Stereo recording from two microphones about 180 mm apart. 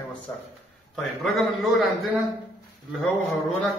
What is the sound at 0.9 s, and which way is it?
Speech, centre (ahead or behind).